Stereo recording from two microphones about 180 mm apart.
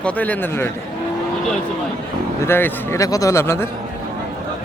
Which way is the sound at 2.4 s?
10° left (ahead or behind).